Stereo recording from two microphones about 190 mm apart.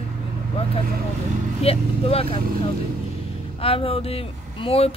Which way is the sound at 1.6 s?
30° left (ahead or behind).